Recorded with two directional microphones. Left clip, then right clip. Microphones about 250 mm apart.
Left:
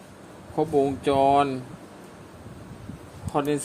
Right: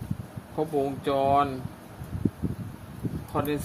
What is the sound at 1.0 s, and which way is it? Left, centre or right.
Speech, left.